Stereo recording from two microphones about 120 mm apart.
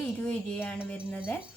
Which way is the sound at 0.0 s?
15° left (ahead or behind).